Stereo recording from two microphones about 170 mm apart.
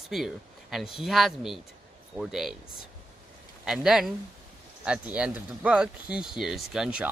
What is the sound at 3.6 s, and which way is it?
Speech, 5° right (ahead or behind).